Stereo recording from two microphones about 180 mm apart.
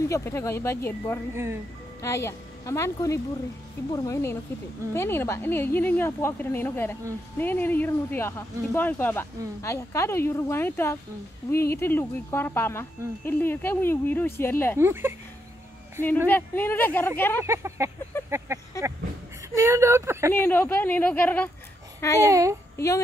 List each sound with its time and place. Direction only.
0.1 s speech: 15° left (ahead or behind)
1.3 s speech: 15° right (ahead or behind)
2.0 s a woman's voice: 15° left (ahead or behind)
14.8 s speech: 15° right (ahead or behind)
16.3 s speech: 10° left (ahead or behind)
17.5 s speech: 15° right (ahead or behind)
20.3 s speech: 10° left (ahead or behind)
22.3 s speech: 15° right (ahead or behind)